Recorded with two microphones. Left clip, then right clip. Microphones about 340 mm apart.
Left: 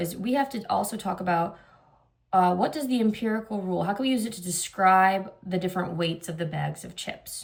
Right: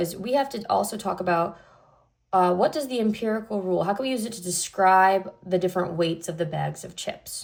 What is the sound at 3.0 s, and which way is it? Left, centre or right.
Speech, centre.